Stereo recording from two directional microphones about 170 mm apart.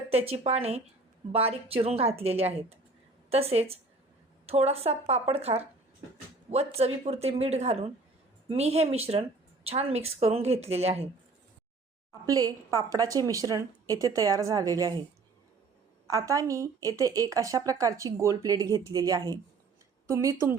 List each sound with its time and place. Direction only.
0.1 s a woman's voice: 35° right (ahead or behind)
12.2 s a woman's voice: 20° right (ahead or behind)
16.0 s a woman's voice: 20° right (ahead or behind)